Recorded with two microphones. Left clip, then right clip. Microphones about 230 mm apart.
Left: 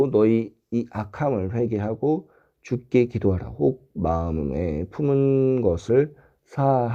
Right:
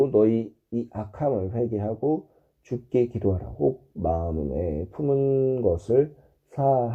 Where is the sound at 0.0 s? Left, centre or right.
Left.